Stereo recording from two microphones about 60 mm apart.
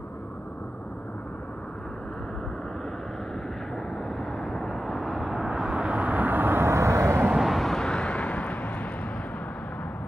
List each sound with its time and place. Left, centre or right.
4.2 s vehicle: centre; by 6.7 s right
6.7 s vehicle: right
7.4 s vehicle: centre; by 8.8 s left